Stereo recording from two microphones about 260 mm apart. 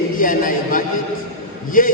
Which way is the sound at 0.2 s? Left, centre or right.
Left.